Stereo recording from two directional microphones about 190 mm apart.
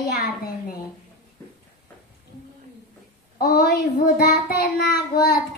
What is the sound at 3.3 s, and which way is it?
A child's voice, 55° left (ahead or behind).